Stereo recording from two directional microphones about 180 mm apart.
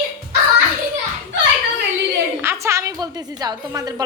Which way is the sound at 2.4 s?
15° right (ahead or behind).